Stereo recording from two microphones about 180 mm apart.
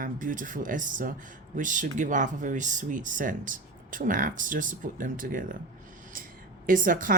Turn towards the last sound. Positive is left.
turn(degrees=-50)  # may be behind; listen again after turning